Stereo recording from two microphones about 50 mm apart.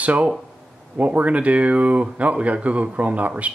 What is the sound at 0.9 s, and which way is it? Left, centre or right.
Speech, right.